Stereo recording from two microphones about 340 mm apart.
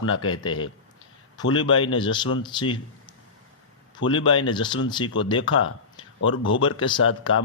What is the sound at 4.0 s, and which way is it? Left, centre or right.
Speech, left.